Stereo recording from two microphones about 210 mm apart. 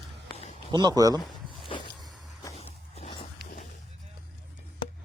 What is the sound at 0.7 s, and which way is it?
Speech, 20° right (ahead or behind).